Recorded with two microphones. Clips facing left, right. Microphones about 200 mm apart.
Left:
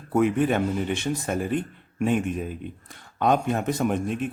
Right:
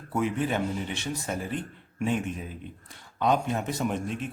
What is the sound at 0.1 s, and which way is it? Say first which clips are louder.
A man's voice: left 6 dB; 55° left (ahead or behind).